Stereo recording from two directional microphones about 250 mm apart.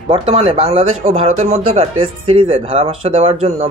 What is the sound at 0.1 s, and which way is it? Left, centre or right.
Speech, right.